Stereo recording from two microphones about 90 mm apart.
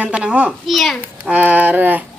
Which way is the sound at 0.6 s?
Centre (ahead or behind).